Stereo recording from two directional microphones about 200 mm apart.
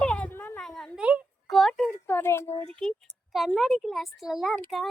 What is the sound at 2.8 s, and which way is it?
A child's voice, 5° left (ahead or behind).